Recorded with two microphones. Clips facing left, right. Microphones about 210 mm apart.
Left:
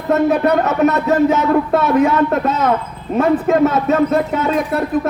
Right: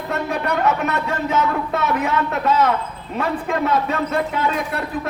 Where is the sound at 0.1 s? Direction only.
45° left (ahead or behind).